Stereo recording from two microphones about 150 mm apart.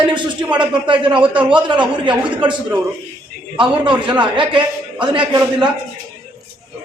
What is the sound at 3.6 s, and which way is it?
A man's voice, 30° right (ahead or behind).